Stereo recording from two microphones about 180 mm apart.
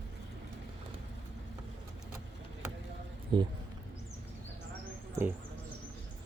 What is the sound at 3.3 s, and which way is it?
Speech, 25° right (ahead or behind).